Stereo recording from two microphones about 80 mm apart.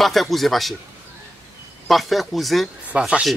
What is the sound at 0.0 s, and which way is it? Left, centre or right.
Speech, centre.